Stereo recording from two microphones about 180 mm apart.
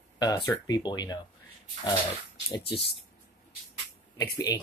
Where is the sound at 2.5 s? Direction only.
25° left (ahead or behind).